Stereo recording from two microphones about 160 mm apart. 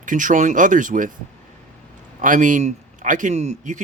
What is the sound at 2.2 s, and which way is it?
Speech, 55° right (ahead or behind).